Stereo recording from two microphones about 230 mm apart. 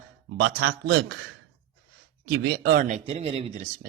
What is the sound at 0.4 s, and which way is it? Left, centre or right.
Speech, right.